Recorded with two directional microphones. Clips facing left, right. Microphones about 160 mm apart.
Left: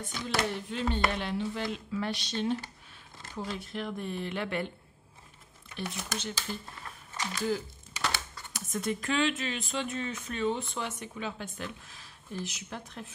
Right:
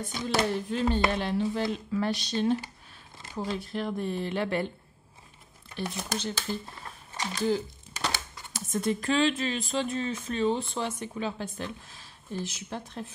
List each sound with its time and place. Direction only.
0.3 s speech: 25° right (ahead or behind)
0.6 s speech: 40° right (ahead or behind)
5.8 s speech: 35° right (ahead or behind)
6.8 s a sound: 30° right (ahead or behind)
8.5 s speech: 30° right (ahead or behind)